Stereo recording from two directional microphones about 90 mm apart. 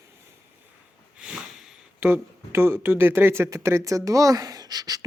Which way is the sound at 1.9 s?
20° right (ahead or behind).